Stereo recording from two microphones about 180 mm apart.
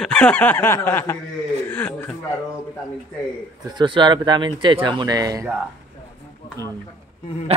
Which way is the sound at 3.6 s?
25° right (ahead or behind).